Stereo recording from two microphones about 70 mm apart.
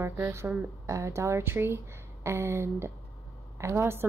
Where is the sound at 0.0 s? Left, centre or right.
Right.